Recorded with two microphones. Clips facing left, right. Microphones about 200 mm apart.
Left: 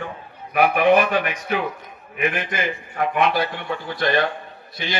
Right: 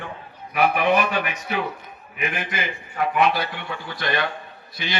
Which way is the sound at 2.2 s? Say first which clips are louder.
Left 4 dB; 50° left (ahead or behind).